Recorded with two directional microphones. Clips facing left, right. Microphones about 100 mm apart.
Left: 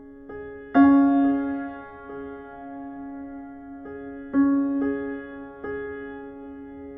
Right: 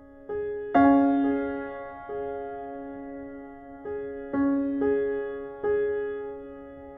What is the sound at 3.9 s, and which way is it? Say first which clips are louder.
Music: right 1 dB; 35° left (ahead or behind).